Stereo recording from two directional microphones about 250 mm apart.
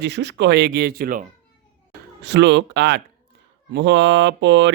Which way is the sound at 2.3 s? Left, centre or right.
Right.